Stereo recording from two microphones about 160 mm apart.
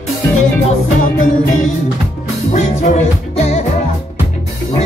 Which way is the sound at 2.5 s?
50° left (ahead or behind).